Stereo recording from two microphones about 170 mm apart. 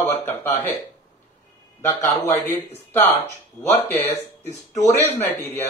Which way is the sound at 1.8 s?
15° left (ahead or behind).